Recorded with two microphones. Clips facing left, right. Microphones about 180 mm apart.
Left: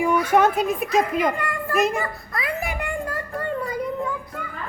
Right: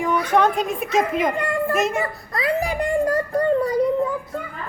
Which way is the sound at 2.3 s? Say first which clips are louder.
Right 7 dB; 35° right (ahead or behind).